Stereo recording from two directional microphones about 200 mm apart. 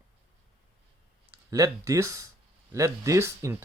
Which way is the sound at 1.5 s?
15° right (ahead or behind).